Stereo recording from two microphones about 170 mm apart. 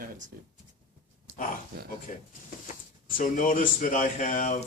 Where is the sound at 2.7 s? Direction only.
50° left (ahead or behind).